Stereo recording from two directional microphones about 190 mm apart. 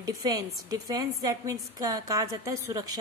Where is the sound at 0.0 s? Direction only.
20° right (ahead or behind).